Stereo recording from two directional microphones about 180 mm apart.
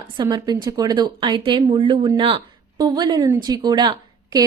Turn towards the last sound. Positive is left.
turn(degrees=-25)  # may be behind; listen again after turning